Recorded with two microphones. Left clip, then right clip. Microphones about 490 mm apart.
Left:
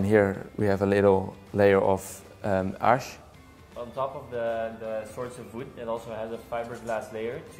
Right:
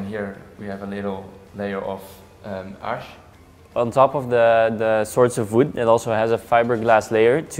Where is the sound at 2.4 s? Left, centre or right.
Left.